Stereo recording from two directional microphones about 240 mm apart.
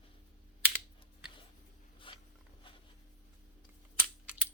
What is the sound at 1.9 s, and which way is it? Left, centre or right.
Zipper, left.